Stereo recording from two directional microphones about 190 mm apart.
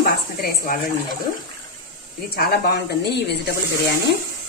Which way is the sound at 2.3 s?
55° left (ahead or behind).